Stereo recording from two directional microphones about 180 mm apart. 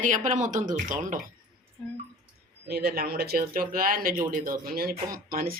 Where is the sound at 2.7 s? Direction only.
60° right (ahead or behind).